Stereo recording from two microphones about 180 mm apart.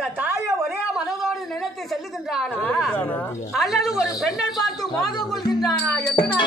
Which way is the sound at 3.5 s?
Centre (ahead or behind).